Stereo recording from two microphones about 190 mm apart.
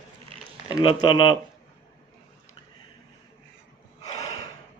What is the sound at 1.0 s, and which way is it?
Speech, 25° left (ahead or behind).